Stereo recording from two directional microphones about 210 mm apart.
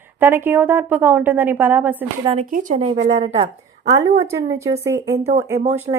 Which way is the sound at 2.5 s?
40° right (ahead or behind).